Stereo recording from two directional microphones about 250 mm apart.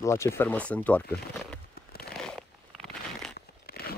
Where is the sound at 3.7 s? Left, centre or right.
Left.